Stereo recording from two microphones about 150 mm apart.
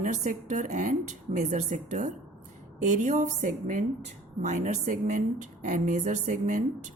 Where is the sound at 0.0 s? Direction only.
55° right (ahead or behind).